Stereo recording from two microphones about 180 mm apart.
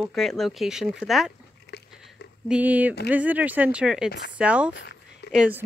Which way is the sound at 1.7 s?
70° left (ahead or behind).